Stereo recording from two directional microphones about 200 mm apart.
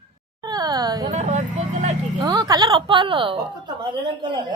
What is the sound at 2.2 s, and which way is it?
A woman's voice, 20° right (ahead or behind).